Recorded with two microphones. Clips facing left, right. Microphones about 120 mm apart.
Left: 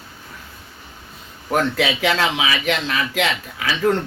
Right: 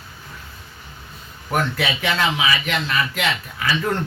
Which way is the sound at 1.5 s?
90° left.